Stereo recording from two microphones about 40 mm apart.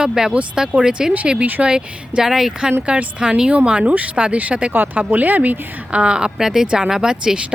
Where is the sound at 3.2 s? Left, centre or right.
Right.